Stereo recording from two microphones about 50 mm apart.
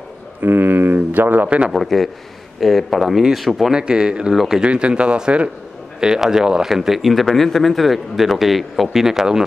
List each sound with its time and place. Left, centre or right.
0.4 s a sound: right
1.7 s a man's voice: centre
3.7 s a man's voice: centre